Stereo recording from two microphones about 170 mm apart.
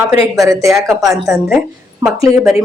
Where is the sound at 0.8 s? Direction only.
Centre (ahead or behind).